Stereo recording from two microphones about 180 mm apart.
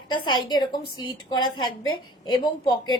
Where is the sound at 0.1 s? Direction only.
25° left (ahead or behind).